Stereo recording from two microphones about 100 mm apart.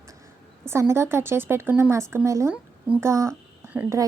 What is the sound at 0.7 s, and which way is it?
Speech, 25° right (ahead or behind).